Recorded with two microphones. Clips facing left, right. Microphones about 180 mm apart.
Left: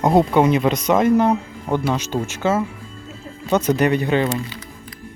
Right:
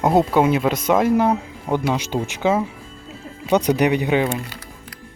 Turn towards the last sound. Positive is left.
turn(degrees=-15)  # may be behind; listen again after turning